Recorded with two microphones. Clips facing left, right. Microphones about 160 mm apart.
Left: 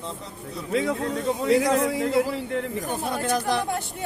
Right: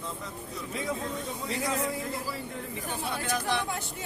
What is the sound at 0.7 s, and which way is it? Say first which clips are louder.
A man's voice: left 9 dB; 80° left.